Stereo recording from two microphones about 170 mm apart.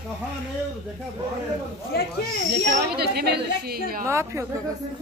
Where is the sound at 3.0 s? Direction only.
75° right (ahead or behind).